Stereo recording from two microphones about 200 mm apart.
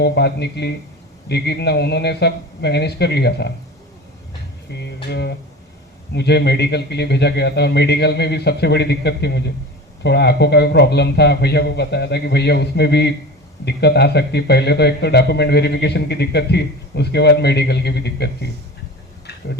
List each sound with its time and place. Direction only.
0.0 s a man's voice: 55° left (ahead or behind)
4.7 s a man's voice: 55° left (ahead or behind)